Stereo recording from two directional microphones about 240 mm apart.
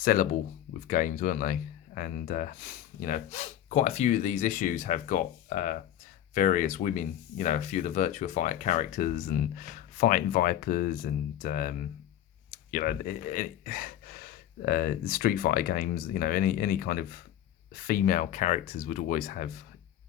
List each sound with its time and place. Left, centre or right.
0.0 s speech: left